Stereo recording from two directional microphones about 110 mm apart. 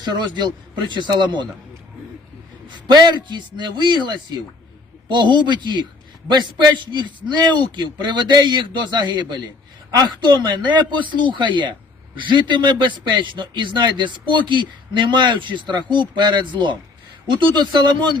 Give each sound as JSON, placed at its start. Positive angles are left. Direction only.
{"t": 0.0, "sound": "a man's voice", "side_deg": -40}
{"t": 2.6, "sound": "a man's voice", "side_deg": -45}
{"t": 6.9, "sound": "a man's voice", "side_deg": -40}